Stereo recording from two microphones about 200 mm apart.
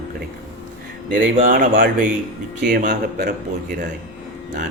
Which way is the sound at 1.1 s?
40° right (ahead or behind).